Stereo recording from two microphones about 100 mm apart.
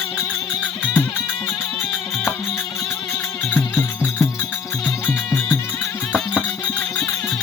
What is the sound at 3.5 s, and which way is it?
Music, 15° left (ahead or behind).